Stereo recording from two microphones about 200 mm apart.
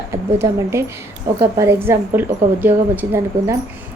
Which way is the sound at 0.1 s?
15° right (ahead or behind).